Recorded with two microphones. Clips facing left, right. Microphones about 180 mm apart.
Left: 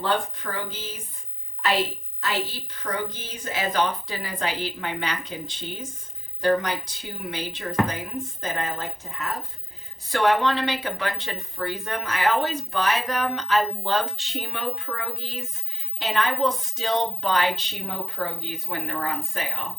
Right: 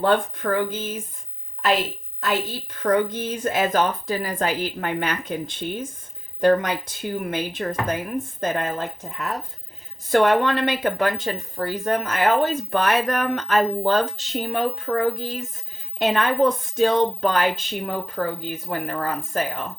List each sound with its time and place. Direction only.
0.0 s speech: 50° right (ahead or behind)
2.2 s speech: 50° right (ahead or behind)
10.1 s speech: 50° right (ahead or behind)